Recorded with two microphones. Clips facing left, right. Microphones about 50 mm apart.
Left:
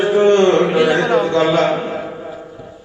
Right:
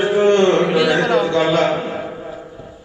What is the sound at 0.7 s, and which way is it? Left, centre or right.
Speech, left.